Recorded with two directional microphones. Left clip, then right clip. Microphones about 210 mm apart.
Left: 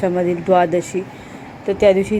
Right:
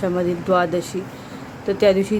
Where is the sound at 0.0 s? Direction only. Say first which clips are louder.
Left 3 dB; 5° left (ahead or behind).